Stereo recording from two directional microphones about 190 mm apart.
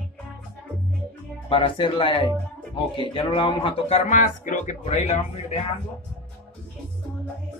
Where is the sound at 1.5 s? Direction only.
30° left (ahead or behind).